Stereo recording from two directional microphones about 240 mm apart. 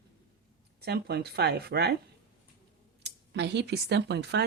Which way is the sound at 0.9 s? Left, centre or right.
Right.